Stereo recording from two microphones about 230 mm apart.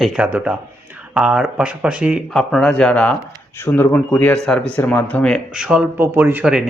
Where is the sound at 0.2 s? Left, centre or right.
Centre.